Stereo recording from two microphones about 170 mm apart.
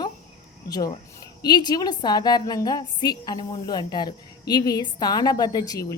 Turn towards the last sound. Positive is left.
turn(degrees=20)  # may be behind; listen again after turning